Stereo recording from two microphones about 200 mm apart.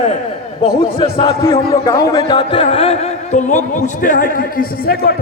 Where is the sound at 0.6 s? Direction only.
30° left (ahead or behind).